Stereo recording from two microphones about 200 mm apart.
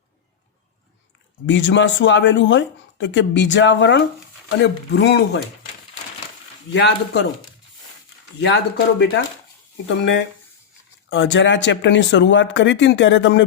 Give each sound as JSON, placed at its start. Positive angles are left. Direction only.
{"t": 1.5, "sound": "speech", "side_deg": 65}
{"t": 6.7, "sound": "speech", "side_deg": 60}
{"t": 8.4, "sound": "speech", "side_deg": 60}